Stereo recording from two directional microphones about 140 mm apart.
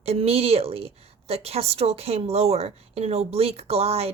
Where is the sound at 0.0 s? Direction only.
45° right (ahead or behind).